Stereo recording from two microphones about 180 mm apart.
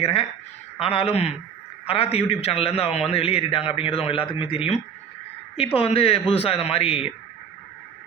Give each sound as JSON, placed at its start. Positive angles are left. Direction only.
{"t": 0.0, "sound": "a man's voice", "side_deg": 35}